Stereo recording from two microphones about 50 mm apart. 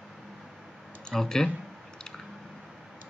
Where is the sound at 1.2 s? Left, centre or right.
Centre.